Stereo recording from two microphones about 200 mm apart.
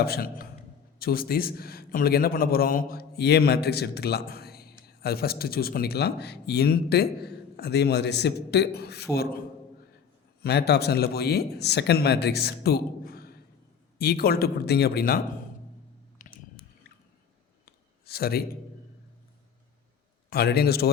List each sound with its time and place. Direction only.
0.0 s a man's voice: 50° left (ahead or behind)
10.4 s speech: 55° left (ahead or behind)
16.2 s a sound: 40° left (ahead or behind)
18.0 s a man's voice: 50° left (ahead or behind)
20.3 s speech: 50° left (ahead or behind)